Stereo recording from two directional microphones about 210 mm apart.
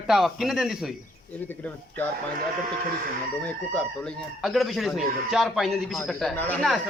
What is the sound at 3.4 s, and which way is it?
Speech, 5° left (ahead or behind).